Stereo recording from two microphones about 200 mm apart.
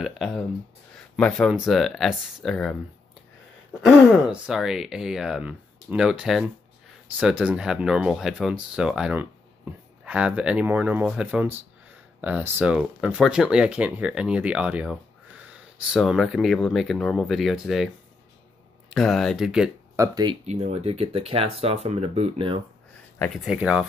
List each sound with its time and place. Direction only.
0.0 s a sound: centre (ahead or behind)
1.1 s speech: centre (ahead or behind)
3.8 s speech: centre (ahead or behind)
18.9 s speech: centre (ahead or behind)
20.0 s speech: 20° right (ahead or behind)
20.4 s speech: 35° right (ahead or behind)
23.3 s speech: 5° right (ahead or behind)